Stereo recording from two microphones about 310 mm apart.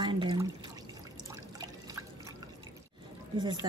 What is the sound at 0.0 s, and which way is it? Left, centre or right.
Drip, centre.